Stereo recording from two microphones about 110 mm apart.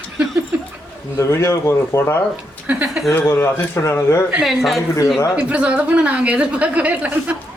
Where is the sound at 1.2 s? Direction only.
25° left (ahead or behind).